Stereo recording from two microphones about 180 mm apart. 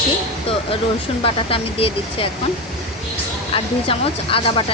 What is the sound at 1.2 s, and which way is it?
Speech, 30° left (ahead or behind).